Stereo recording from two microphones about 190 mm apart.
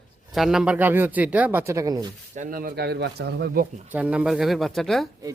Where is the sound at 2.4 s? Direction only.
50° right (ahead or behind).